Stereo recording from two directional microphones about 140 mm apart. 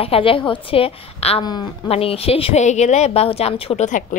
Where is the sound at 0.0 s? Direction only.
40° left (ahead or behind).